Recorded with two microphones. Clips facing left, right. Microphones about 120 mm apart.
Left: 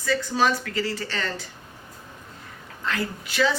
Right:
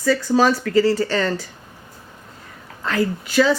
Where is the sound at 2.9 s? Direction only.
40° right (ahead or behind).